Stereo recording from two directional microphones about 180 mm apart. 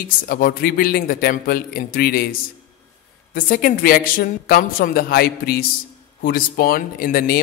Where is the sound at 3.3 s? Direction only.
50° left (ahead or behind).